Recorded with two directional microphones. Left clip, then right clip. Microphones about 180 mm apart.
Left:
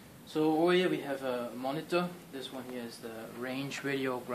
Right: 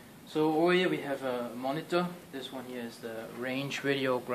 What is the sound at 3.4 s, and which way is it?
Speech, 30° right (ahead or behind).